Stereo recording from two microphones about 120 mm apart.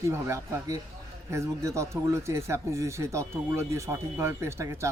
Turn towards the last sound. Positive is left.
turn(degrees=-25)  # may be behind; listen again after turning